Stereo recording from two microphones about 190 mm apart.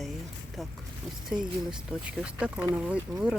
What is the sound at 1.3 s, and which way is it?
Speech, 5° right (ahead or behind).